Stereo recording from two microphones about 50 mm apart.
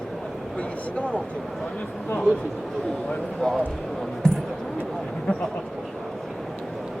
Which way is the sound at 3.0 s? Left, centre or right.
Centre.